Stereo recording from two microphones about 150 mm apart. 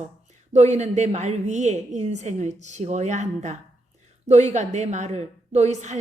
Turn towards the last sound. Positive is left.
turn(degrees=-50)  # may be behind; listen again after turning